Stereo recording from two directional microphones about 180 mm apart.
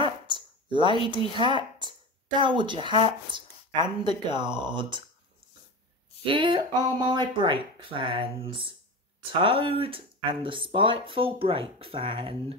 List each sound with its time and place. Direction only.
0.3 s speech: 25° right (ahead or behind)
6.2 s speech: 30° right (ahead or behind)